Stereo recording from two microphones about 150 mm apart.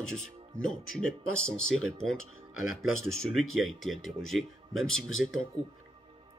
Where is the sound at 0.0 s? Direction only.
5° left (ahead or behind).